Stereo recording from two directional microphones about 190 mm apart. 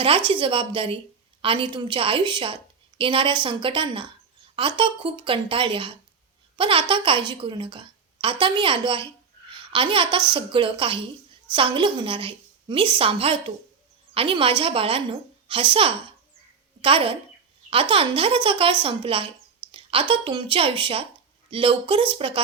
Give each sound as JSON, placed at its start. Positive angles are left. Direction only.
{"t": 0.3, "sound": "a woman's voice", "side_deg": -25}